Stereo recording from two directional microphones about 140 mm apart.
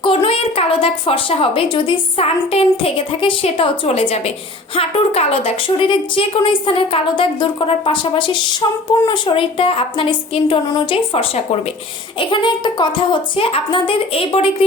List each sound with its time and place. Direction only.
0.0 s a woman's voice: 40° left (ahead or behind)